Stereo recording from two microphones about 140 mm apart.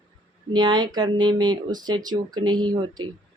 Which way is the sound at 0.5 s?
30° right (ahead or behind).